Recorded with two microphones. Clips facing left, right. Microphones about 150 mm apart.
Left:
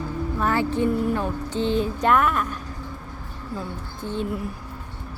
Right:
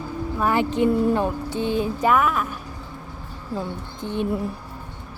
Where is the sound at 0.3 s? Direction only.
15° right (ahead or behind).